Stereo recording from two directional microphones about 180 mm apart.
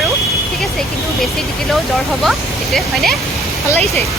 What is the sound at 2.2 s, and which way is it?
Speech, centre (ahead or behind).